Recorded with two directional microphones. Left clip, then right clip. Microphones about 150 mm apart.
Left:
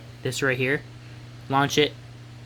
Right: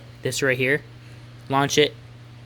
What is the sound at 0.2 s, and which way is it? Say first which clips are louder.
Speech: right 3 dB; 10° right (ahead or behind).